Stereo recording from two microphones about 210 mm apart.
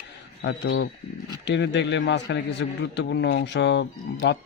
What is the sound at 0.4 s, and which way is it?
A man's voice, 60° left (ahead or behind).